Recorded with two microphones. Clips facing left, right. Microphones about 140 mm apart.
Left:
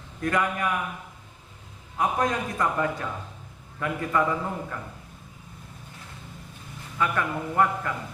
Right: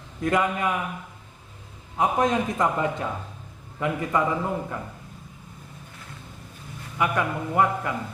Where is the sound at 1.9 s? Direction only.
20° right (ahead or behind).